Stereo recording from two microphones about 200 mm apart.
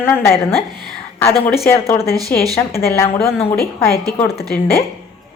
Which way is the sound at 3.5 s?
50° left (ahead or behind).